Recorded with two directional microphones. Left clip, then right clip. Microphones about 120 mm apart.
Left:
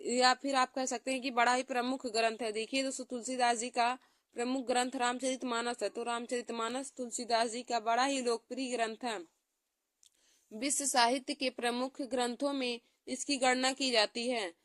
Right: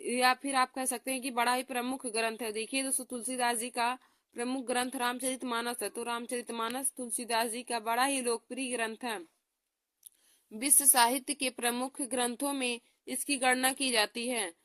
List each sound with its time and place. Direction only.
0.0 s speech: 25° right (ahead or behind)
10.6 s a woman's voice: 30° right (ahead or behind)